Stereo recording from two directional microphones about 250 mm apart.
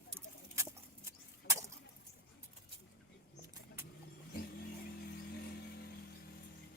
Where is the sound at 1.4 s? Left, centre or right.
Left.